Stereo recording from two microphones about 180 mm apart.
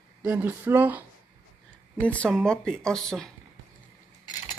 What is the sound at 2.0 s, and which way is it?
Speech, 5° left (ahead or behind).